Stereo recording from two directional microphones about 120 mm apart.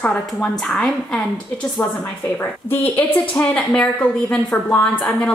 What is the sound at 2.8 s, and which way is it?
A woman's voice, 15° left (ahead or behind).